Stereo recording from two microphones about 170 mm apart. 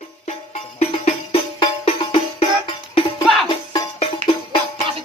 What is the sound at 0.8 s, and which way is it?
Music, 40° left (ahead or behind).